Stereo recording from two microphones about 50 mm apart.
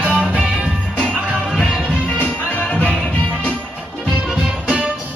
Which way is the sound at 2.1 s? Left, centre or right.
Left.